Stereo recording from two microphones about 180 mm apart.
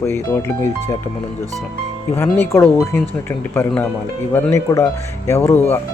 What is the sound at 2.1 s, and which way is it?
Speech, 10° left (ahead or behind).